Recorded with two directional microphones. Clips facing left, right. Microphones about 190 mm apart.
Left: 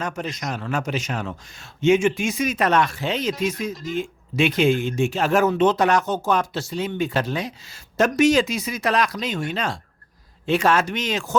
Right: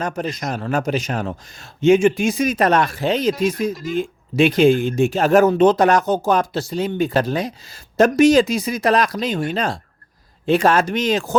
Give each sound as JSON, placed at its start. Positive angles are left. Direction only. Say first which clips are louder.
{"t": 0.4, "sound": "speech", "louder": "right 5 dB", "side_deg": -40}
{"t": 4.4, "sound": "speech", "louder": "right 5 dB", "side_deg": -35}